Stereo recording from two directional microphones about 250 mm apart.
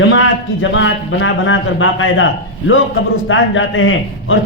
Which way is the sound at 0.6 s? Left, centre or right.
Left.